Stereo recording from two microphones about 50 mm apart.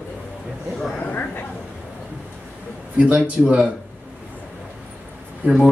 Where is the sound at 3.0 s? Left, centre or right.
Right.